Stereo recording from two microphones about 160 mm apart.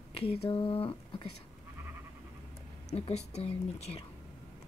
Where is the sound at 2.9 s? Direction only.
40° left (ahead or behind).